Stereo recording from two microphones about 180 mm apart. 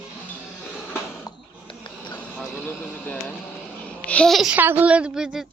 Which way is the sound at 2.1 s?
5° left (ahead or behind).